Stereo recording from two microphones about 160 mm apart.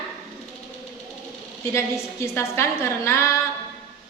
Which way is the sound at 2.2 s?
15° left (ahead or behind).